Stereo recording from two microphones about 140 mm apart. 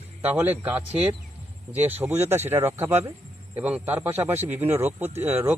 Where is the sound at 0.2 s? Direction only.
15° right (ahead or behind).